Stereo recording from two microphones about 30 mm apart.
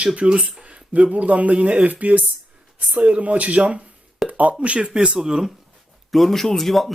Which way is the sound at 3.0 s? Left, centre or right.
Right.